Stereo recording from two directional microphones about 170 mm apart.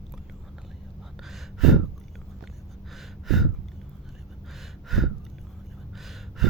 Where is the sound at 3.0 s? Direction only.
Centre (ahead or behind).